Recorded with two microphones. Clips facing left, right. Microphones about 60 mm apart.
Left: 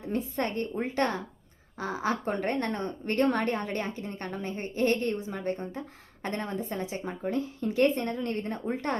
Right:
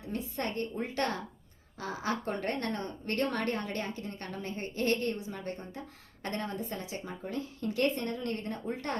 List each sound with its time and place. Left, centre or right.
0.0 s a woman's voice: left